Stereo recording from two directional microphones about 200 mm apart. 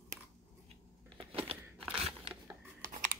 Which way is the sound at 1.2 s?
30° right (ahead or behind).